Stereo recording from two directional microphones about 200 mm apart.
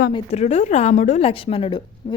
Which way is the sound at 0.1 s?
30° left (ahead or behind).